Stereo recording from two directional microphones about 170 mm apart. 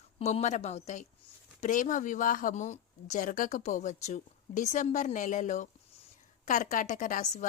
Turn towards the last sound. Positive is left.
turn(degrees=45)  # may be behind; listen again after turning